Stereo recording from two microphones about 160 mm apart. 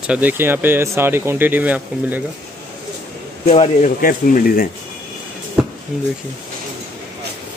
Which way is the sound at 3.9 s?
65° left (ahead or behind).